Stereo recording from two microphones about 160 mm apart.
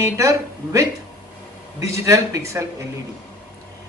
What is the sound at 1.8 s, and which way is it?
Speech, 20° right (ahead or behind).